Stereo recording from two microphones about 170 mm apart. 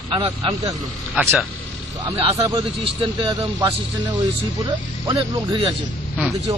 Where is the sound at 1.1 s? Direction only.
Centre (ahead or behind).